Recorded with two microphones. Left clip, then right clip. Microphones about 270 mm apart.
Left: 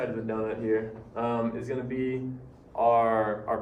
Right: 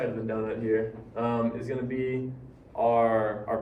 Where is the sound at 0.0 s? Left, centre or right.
Centre.